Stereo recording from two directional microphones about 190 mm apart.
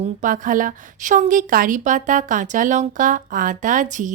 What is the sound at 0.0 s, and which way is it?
A woman's voice, 45° right (ahead or behind).